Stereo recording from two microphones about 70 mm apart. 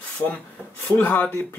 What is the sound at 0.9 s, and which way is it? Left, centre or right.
Speech, left.